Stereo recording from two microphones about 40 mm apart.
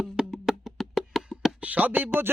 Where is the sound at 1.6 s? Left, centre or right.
Right.